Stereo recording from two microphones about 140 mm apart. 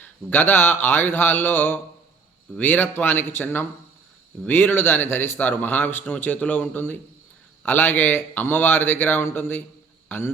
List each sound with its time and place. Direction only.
0.0 s a man's voice: 15° left (ahead or behind)